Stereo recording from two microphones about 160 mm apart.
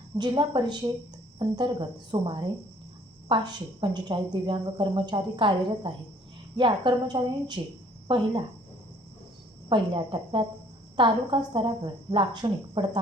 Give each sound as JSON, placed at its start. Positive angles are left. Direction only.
{"t": 0.2, "sound": "speech", "side_deg": -30}
{"t": 9.6, "sound": "speech", "side_deg": -30}